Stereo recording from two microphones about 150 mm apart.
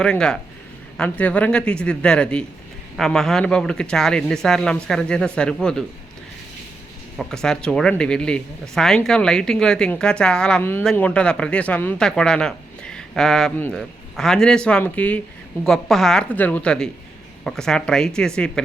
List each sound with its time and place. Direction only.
0.0 s a man's voice: 5° left (ahead or behind)
7.2 s speech: 5° left (ahead or behind)
10.6 s a man's voice: 15° left (ahead or behind)